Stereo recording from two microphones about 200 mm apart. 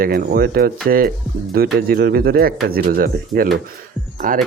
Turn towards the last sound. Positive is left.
turn(degrees=-40)  # may be behind; listen again after turning